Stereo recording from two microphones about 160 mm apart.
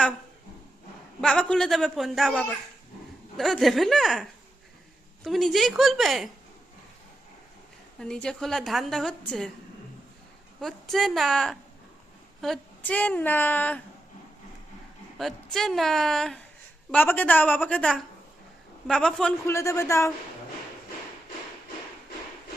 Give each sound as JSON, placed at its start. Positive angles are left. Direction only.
{"t": 1.2, "sound": "a woman's voice", "side_deg": 5}
{"t": 7.9, "sound": "a woman's voice", "side_deg": 5}
{"t": 10.6, "sound": "a woman's voice", "side_deg": 0}
{"t": 15.2, "sound": "a woman's voice", "side_deg": 0}
{"t": 19.5, "sound": "a woman's voice", "side_deg": 20}